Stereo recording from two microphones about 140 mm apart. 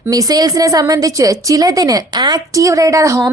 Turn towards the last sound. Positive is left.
turn(degrees=-20)  # may be behind; listen again after turning